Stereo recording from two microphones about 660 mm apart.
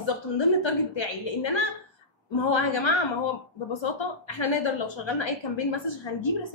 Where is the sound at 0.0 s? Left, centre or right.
Left.